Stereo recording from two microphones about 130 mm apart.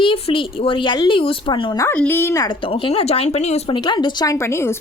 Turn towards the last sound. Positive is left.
turn(degrees=20)  # may be behind; listen again after turning